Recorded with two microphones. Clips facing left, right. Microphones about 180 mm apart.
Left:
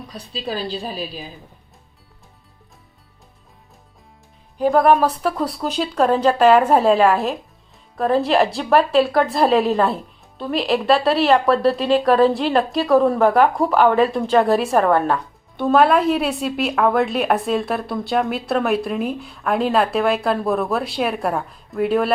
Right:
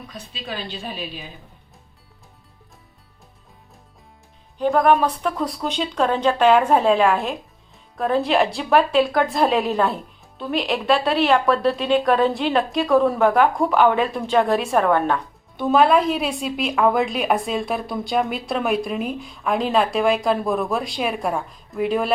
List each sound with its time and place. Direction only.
0.1 s a woman's voice: 35° left (ahead or behind)
4.5 s a woman's voice: 5° left (ahead or behind)